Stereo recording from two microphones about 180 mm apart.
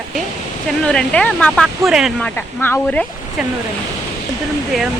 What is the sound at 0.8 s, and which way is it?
Speech, 5° left (ahead or behind).